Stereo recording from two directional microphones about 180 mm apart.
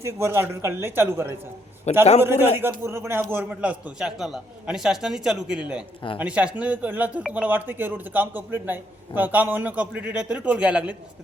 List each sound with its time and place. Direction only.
0.0 s speech: 15° right (ahead or behind)
1.9 s a man's voice: 40° left (ahead or behind)
2.2 s a man's voice: 15° right (ahead or behind)